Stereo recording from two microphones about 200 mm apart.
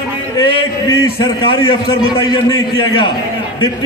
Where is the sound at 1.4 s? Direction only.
25° left (ahead or behind).